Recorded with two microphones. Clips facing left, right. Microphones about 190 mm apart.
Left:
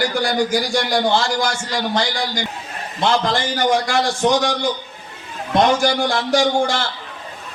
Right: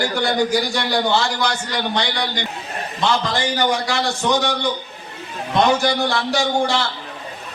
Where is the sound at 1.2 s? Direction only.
45° left (ahead or behind).